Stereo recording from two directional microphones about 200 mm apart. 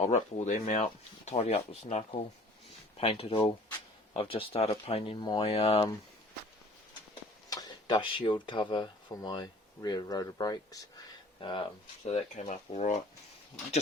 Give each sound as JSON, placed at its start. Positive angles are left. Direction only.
{"t": 0.0, "sound": "speech", "side_deg": 35}
{"t": 7.5, "sound": "speech", "side_deg": 20}